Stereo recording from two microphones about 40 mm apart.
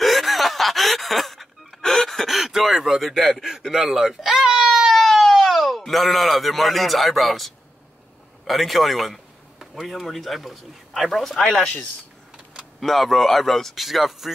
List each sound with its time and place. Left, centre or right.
0.0 s snicker: centre
1.8 s gasp: centre
3.7 s speech: centre
4.6 s a sound: centre
5.8 s speech: centre
11.5 s speech: left
12.8 s speech: centre